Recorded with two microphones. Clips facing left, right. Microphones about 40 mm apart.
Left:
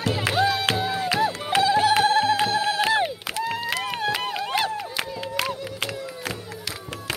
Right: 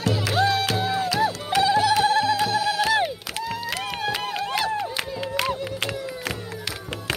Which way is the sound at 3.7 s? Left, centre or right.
Centre.